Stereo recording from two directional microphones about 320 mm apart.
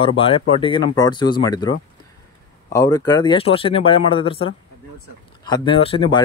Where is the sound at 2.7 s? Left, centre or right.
Centre.